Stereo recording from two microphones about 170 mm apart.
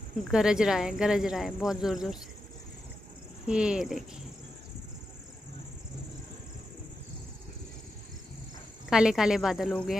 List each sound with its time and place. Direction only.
0.3 s speech: 5° right (ahead or behind)
3.4 s speech: 5° right (ahead or behind)
8.9 s speech: 5° right (ahead or behind)